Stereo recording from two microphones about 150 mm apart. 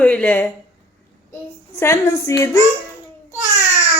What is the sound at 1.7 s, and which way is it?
Speech, 15° left (ahead or behind).